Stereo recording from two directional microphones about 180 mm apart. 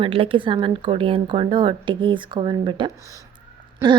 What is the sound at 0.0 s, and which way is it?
A woman's voice, 30° right (ahead or behind).